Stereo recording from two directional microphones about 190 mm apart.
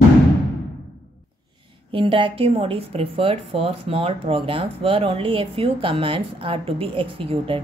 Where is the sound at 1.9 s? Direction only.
30° right (ahead or behind).